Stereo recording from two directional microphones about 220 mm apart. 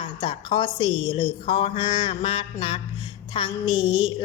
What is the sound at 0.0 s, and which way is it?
A woman's voice, 20° left (ahead or behind).